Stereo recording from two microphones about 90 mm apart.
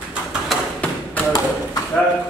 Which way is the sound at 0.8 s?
15° left (ahead or behind).